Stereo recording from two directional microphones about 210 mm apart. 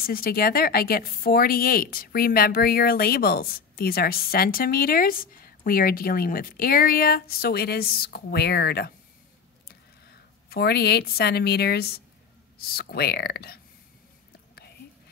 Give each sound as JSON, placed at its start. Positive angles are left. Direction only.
{"t": 0.0, "sound": "speech", "side_deg": 45}
{"t": 9.7, "sound": "a sound", "side_deg": 50}
{"t": 12.7, "sound": "speech", "side_deg": 50}